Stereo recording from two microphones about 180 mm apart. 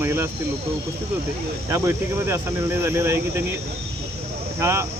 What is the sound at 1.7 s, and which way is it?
Speech, 15° right (ahead or behind).